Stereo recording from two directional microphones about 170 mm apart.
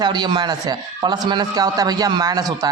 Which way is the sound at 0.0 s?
25° right (ahead or behind).